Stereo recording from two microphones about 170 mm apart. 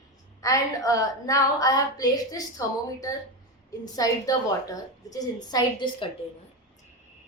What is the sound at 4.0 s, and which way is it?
A woman's voice, 20° left (ahead or behind).